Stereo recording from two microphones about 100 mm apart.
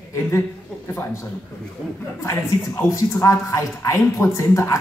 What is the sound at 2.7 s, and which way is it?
Speech, 30° left (ahead or behind).